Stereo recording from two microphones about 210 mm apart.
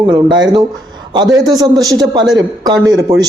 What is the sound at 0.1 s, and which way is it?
A man's voice, 20° right (ahead or behind).